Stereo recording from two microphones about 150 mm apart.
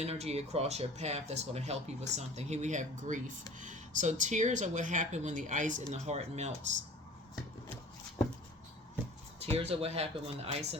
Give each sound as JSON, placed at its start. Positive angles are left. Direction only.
{"t": 0.0, "sound": "speech", "side_deg": -45}
{"t": 5.9, "sound": "speech", "side_deg": -45}
{"t": 9.4, "sound": "speech", "side_deg": -40}